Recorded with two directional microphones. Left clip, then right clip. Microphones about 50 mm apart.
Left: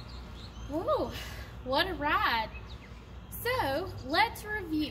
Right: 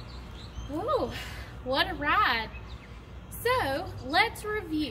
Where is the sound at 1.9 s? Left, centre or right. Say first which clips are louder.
Right 3 dB; right.